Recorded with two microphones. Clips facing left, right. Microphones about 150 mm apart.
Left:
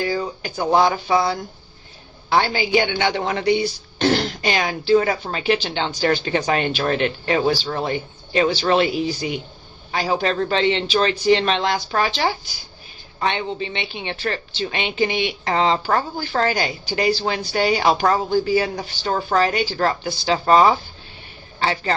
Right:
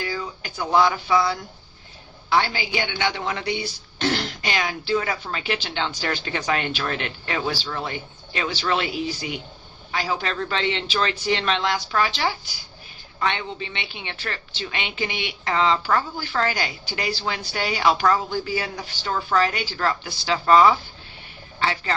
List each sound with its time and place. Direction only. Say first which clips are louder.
0.0 s speech: left 6 dB; 35° left (ahead or behind)